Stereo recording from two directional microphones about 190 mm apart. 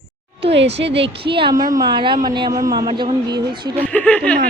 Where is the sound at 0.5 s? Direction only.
65° right (ahead or behind).